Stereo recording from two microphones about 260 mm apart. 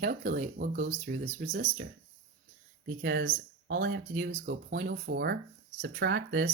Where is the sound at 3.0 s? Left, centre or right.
Right.